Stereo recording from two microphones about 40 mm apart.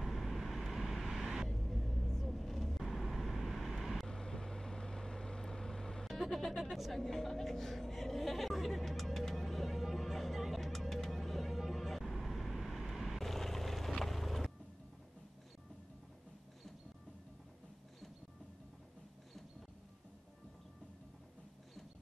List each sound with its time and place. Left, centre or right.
0.0 s vehicle: centre
4.1 s vehicle: centre
6.0 s speech: centre
9.3 s vehicle: centre
13.2 s vehicle: centre
13.9 s boat: centre